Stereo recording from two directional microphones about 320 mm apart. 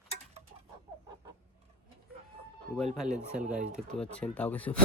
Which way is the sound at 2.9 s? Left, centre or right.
Centre.